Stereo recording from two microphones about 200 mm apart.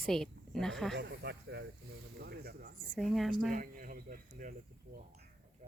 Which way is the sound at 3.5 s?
40° right (ahead or behind).